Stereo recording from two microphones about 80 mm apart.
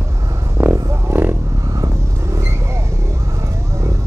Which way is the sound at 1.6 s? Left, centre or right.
Right.